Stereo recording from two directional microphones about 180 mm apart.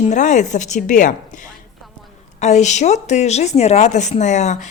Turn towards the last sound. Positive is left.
turn(degrees=40)  # may be behind; listen again after turning